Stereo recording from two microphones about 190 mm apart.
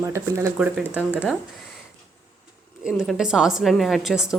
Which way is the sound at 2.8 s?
Centre (ahead or behind).